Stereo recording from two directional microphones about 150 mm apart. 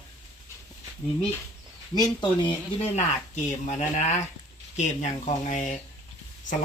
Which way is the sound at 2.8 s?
50° left (ahead or behind).